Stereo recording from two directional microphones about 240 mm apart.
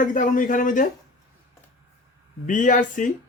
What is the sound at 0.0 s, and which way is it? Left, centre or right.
Speech, left.